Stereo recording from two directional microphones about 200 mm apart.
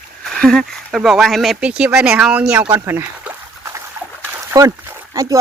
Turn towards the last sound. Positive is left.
turn(degrees=-15)  # may be behind; listen again after turning